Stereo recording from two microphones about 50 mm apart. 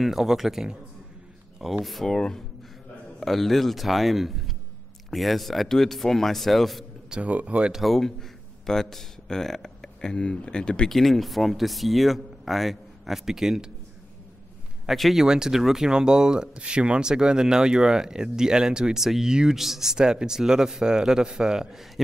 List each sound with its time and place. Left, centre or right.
0.0 s speech: centre
7.1 s speech: right
7.7 s speech: centre
10.9 s speech: centre
14.9 s speech: centre